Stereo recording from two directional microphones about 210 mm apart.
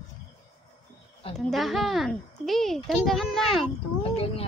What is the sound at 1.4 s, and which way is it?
Speech, centre (ahead or behind).